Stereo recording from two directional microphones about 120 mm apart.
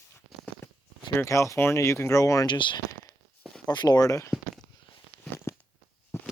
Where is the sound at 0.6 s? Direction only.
20° left (ahead or behind).